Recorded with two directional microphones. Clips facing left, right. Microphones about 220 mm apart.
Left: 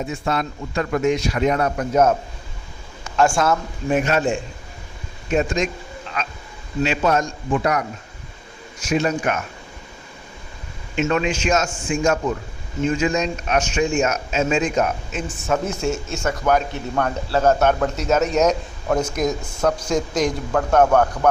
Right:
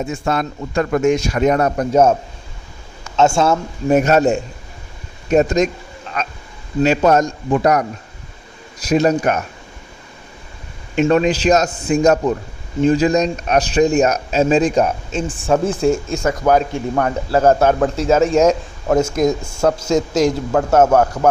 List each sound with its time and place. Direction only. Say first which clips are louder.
0.0 s a man's voice: right 3 dB; 45° right (ahead or behind); by 2.1 s 30° right (ahead or behind)
3.2 s a man's voice: right 4 dB; 25° right (ahead or behind)
3.8 s speech: right 6 dB; 40° right (ahead or behind)
6.8 s speech: right 6 dB; 40° right (ahead or behind)
10.9 s a man's voice: right 6 dB; 40° right (ahead or behind)